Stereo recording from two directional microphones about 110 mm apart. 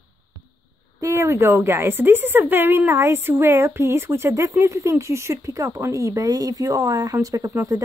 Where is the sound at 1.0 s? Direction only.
25° right (ahead or behind).